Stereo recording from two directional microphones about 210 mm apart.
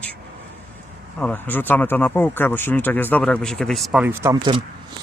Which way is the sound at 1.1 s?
10° left (ahead or behind).